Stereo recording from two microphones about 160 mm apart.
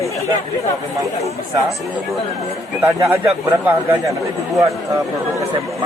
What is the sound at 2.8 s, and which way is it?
Speech, 10° right (ahead or behind).